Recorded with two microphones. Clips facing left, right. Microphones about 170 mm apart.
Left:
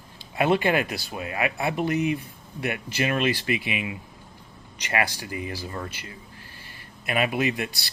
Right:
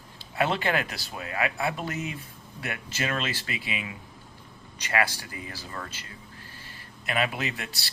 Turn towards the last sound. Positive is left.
turn(degrees=15)  # may be behind; listen again after turning